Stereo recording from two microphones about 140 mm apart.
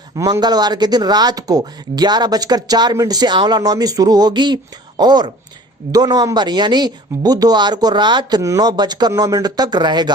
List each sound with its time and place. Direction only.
0.2 s speech: 30° right (ahead or behind)